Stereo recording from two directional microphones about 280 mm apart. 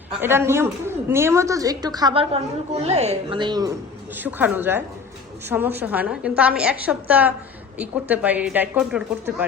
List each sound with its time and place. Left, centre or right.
0.2 s a woman's voice: centre